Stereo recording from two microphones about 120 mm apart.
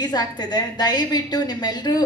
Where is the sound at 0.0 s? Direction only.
35° left (ahead or behind).